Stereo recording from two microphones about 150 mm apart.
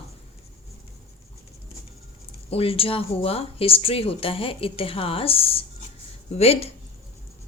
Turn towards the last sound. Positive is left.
turn(degrees=45)  # may be behind; listen again after turning